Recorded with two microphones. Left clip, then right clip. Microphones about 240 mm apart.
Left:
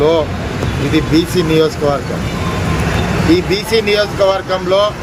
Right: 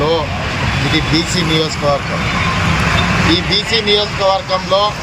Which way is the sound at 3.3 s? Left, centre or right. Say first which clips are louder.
Left 1 dB; left.